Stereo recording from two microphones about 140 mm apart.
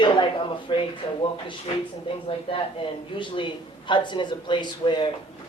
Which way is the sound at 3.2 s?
35° left (ahead or behind).